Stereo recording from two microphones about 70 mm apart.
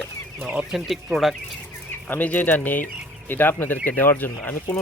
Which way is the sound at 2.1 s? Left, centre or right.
Left.